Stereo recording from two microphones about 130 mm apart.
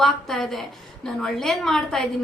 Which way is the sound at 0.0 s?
Centre (ahead or behind).